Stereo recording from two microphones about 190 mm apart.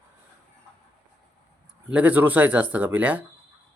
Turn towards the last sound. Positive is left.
turn(degrees=-10)  # may be behind; listen again after turning